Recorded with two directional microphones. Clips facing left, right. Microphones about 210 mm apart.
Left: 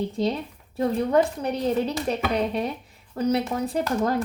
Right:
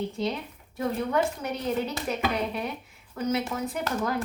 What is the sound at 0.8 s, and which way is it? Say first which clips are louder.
A woman's voice: left 5 dB; 35° left (ahead or behind).